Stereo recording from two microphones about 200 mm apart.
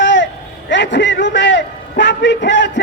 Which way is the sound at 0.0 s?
65° left (ahead or behind).